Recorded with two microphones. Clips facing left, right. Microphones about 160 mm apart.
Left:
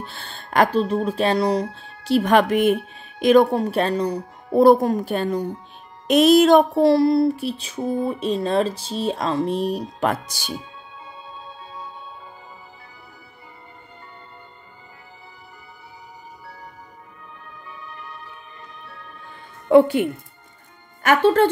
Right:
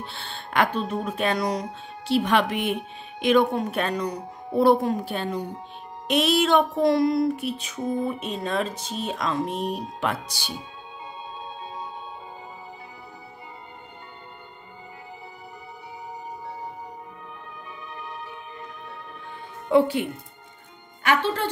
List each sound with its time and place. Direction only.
0.0 s music: 45° left (ahead or behind)
4.6 s speech: 40° left (ahead or behind)
6.0 s music: 40° left (ahead or behind)
19.7 s speech: 50° left (ahead or behind)